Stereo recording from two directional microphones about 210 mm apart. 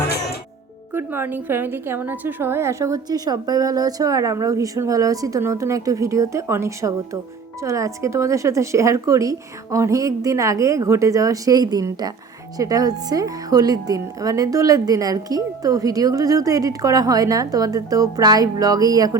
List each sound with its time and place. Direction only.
0.9 s a woman's voice: 10° right (ahead or behind)